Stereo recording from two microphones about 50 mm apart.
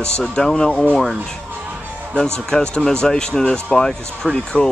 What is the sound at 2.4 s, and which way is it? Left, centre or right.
Speech, centre.